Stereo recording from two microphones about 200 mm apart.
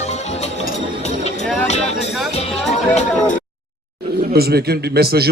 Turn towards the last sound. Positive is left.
turn(degrees=-50)  # may be behind; listen again after turning